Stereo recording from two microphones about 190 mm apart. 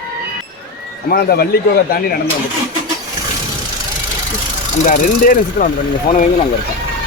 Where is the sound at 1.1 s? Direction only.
55° left (ahead or behind).